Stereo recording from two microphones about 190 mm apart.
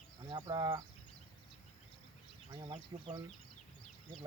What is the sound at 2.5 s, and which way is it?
Speech, 25° right (ahead or behind).